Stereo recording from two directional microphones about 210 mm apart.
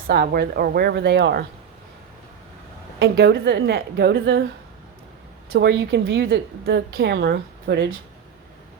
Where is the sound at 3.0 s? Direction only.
50° right (ahead or behind).